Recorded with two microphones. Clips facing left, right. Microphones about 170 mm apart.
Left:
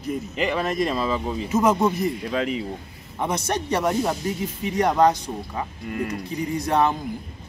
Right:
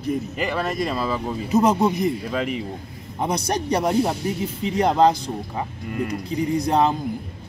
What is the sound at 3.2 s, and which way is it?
Speech, 35° right (ahead or behind).